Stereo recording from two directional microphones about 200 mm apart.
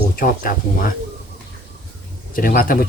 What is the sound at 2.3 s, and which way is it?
Speech, 45° left (ahead or behind).